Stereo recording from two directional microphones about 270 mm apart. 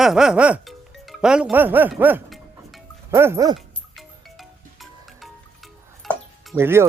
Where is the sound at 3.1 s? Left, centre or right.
Centre.